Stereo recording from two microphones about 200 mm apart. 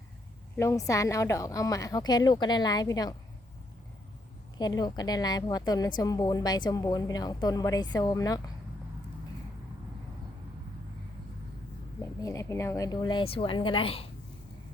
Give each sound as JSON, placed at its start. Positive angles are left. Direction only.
{"t": 0.5, "sound": "a woman's voice", "side_deg": 15}
{"t": 4.5, "sound": "a woman's voice", "side_deg": 20}
{"t": 12.2, "sound": "a woman's voice", "side_deg": 15}